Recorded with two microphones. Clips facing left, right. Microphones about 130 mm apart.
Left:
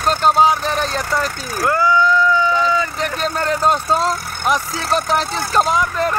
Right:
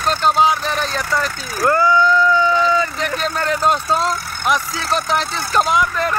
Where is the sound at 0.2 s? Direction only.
40° left (ahead or behind).